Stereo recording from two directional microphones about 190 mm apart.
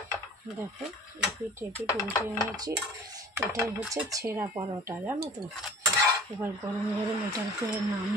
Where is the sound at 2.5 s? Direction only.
20° right (ahead or behind).